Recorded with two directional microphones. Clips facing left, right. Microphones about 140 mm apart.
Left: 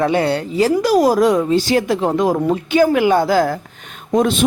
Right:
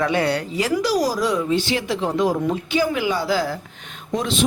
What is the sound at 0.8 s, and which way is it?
Speech, 55° left (ahead or behind).